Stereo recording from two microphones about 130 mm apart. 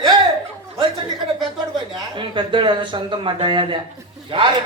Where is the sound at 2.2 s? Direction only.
40° right (ahead or behind).